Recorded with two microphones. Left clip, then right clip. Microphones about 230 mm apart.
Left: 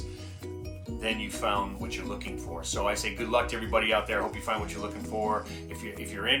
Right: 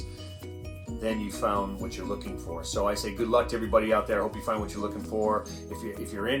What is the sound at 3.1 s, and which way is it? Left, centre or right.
Speech, left.